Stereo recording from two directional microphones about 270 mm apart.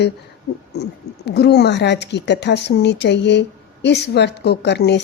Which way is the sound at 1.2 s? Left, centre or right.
Left.